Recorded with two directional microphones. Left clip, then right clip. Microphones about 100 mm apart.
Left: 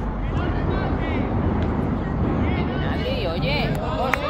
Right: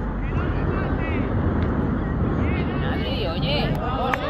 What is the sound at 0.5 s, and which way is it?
Vehicle, 30° left (ahead or behind).